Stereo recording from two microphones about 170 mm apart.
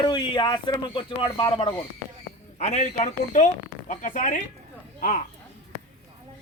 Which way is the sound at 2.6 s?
40° left (ahead or behind).